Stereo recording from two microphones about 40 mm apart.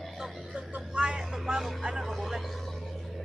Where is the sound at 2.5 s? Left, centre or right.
Centre.